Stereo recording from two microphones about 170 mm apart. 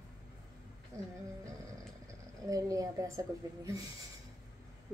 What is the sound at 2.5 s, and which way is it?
A woman's voice, 20° right (ahead or behind).